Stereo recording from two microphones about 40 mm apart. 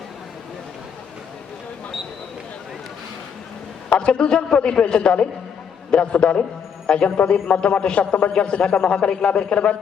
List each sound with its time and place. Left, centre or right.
3.9 s a man's voice: left
7.3 s a man's voice: left
7.8 s a man's voice: left